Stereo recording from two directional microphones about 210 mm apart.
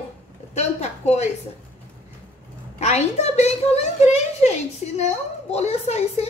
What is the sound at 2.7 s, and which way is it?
A woman's voice, 30° left (ahead or behind).